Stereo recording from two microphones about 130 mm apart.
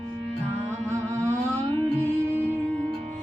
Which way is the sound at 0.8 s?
20° right (ahead or behind).